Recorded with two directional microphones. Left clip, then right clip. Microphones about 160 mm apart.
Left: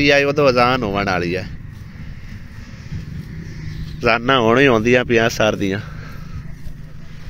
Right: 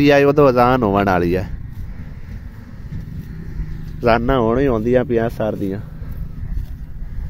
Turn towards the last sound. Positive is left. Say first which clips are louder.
# left 4 dB
turn(degrees=-10)  # may be behind; listen again after turning